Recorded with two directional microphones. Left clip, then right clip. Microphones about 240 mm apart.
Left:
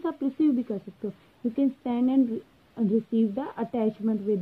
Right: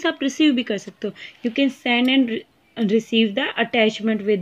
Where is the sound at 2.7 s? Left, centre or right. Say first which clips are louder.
Right 7 dB; right.